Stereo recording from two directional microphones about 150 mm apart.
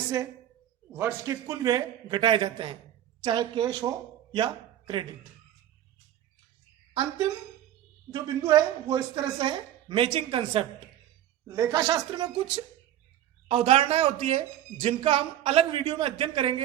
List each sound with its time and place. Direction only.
0.9 s a man's voice: 15° right (ahead or behind)
8.1 s speech: 30° right (ahead or behind)
11.4 s a man's voice: 25° right (ahead or behind)
13.5 s speech: 40° right (ahead or behind)